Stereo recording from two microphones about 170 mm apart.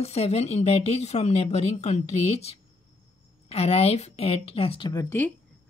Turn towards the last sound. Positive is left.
turn(degrees=25)  # may be behind; listen again after turning